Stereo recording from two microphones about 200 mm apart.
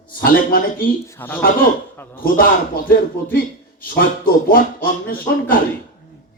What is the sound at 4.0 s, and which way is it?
A man's voice, 45° left (ahead or behind).